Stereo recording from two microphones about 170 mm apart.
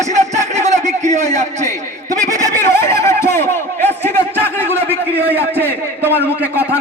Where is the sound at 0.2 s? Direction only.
45° right (ahead or behind).